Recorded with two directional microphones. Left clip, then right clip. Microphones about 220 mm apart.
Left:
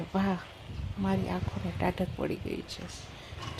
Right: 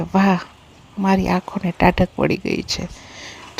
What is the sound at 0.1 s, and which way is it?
Speech, 40° right (ahead or behind).